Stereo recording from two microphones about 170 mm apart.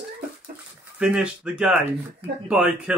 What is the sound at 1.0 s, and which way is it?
Speech, 5° right (ahead or behind).